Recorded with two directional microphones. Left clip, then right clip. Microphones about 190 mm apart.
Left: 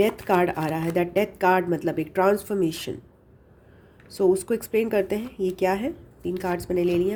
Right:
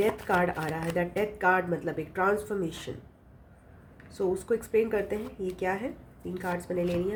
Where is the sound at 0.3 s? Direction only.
45° left (ahead or behind).